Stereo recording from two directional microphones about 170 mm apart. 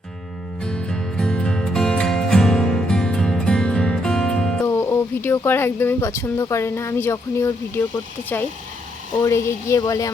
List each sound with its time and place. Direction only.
0.6 s music: 5° left (ahead or behind)
4.6 s speech: 15° left (ahead or behind)